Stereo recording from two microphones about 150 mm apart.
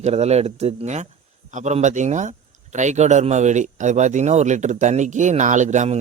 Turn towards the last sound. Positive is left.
turn(degrees=-55)  # may be behind; listen again after turning